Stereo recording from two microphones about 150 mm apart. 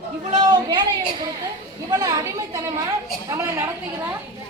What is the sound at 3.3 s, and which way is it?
Speech, 15° right (ahead or behind).